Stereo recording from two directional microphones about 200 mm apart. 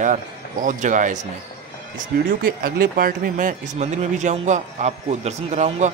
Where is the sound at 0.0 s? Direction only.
40° right (ahead or behind).